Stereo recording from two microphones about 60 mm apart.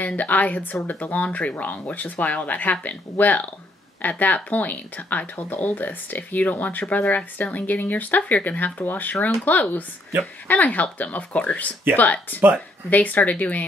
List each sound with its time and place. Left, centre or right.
0.0 s speech: left